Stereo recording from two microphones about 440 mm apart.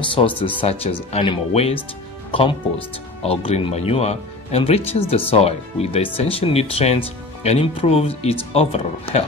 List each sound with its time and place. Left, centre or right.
0.0 s speech: centre